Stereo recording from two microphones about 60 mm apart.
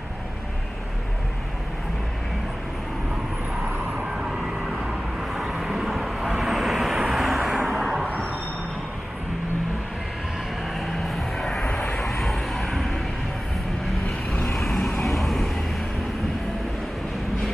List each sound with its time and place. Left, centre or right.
4.1 s a sound: centre
5.5 s vehicle: centre
10.8 s music: centre
12.0 s vehicle: centre
14.5 s vehicle: centre